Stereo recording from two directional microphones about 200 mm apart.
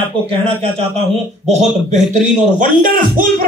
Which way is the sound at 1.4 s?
35° right (ahead or behind).